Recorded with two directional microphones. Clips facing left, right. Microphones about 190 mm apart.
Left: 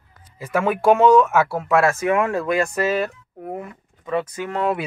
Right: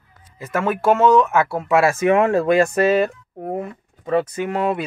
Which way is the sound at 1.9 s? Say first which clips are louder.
Right 4 dB; 25° right (ahead or behind).